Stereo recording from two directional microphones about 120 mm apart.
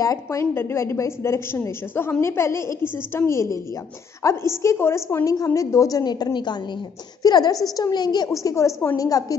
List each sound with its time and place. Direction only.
0.0 s a woman's voice: 25° left (ahead or behind)